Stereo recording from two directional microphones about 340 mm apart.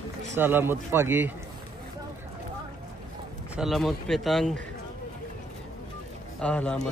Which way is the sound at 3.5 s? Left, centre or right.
Centre.